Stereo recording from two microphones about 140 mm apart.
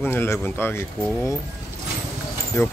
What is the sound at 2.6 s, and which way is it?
Speech, 25° left (ahead or behind).